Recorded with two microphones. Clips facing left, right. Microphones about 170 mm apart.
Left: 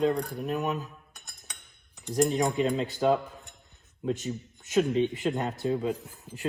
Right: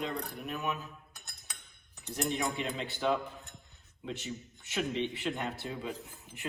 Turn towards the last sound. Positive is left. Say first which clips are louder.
# left 8 dB
turn(degrees=40)  # may be behind; listen again after turning